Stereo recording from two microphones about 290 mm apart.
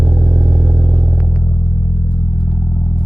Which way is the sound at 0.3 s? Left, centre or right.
Right.